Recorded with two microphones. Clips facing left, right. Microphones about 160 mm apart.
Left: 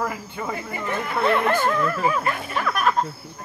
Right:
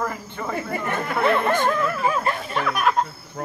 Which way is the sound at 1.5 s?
5° left (ahead or behind).